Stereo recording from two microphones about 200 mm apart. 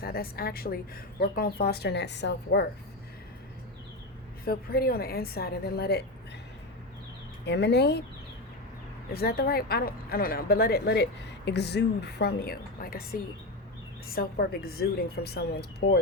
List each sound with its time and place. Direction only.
0.0 s a woman's voice: 50° left (ahead or behind)
4.4 s a woman's voice: 50° left (ahead or behind)
7.4 s a woman's voice: 60° left (ahead or behind)
9.1 s a woman's voice: 50° left (ahead or behind)